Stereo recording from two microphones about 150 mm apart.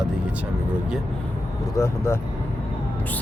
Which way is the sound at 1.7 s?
20° left (ahead or behind).